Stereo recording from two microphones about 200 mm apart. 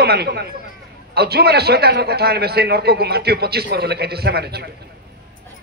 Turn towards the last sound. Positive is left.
turn(degrees=-55)  # may be behind; listen again after turning